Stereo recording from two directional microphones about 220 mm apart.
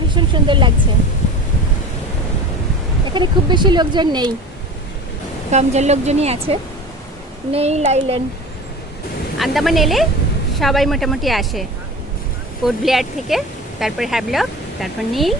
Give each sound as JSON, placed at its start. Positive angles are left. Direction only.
{"t": 0.1, "sound": "vehicle", "side_deg": -20}
{"t": 3.1, "sound": "speech", "side_deg": -20}
{"t": 5.5, "sound": "speech", "side_deg": -30}
{"t": 9.4, "sound": "speech", "side_deg": 0}
{"t": 12.6, "sound": "speech", "side_deg": 0}